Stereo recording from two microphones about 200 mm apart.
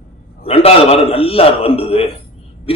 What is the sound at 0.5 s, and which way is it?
A man's voice, 30° left (ahead or behind).